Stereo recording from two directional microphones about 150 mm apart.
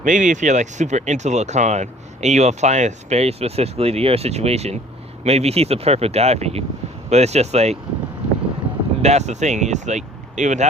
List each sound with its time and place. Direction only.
0.0 s speech: 55° right (ahead or behind)
9.0 s speech: 45° right (ahead or behind)